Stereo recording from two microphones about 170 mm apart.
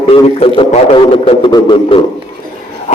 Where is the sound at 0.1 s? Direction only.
35° left (ahead or behind).